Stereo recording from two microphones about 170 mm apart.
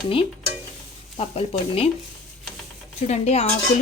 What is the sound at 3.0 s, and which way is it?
Speech, 40° left (ahead or behind).